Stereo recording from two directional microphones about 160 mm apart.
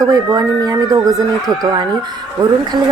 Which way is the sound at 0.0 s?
25° right (ahead or behind).